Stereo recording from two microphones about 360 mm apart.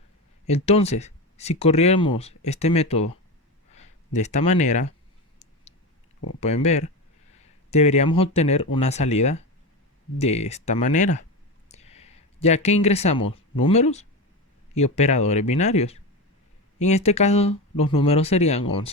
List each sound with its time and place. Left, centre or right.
0.4 s speech: centre
6.4 s speech: centre